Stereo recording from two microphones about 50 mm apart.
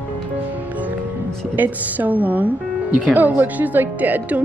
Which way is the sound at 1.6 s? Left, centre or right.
Right.